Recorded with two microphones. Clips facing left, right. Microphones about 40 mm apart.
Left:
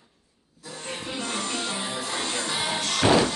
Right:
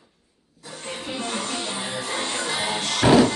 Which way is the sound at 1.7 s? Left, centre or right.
Right.